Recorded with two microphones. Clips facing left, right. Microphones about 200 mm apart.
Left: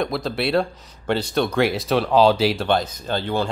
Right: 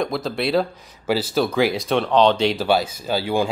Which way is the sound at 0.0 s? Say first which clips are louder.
Even; centre (ahead or behind).